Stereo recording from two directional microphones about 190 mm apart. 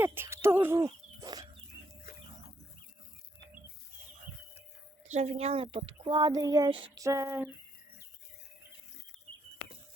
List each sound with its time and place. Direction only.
0.0 s speech: 10° right (ahead or behind)
0.9 s a sound: 20° right (ahead or behind)
5.1 s speech: 35° right (ahead or behind); by 7.5 s 10° right (ahead or behind)